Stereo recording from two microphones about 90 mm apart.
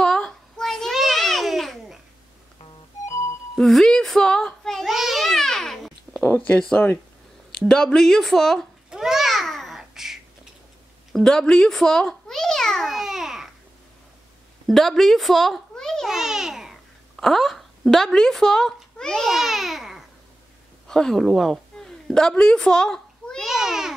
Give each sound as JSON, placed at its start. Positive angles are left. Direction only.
{"t": 0.0, "sound": "babbling", "side_deg": 5}
{"t": 3.1, "sound": "music", "side_deg": 35}
{"t": 3.5, "sound": "a sound", "side_deg": 5}
{"t": 6.2, "sound": "speech", "side_deg": 20}
{"t": 7.5, "sound": "babbling", "side_deg": 5}
{"t": 11.1, "sound": "babbling", "side_deg": 5}
{"t": 14.7, "sound": "babbling", "side_deg": 0}
{"t": 17.2, "sound": "a sound", "side_deg": 0}
{"t": 20.8, "sound": "a woman's voice", "side_deg": 5}
{"t": 23.4, "sound": "babbling", "side_deg": -5}